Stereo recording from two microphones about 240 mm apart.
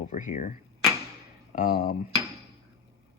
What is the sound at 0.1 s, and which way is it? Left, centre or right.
Speech, left.